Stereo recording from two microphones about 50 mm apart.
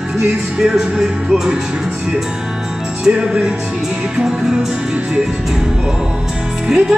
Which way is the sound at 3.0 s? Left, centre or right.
Centre.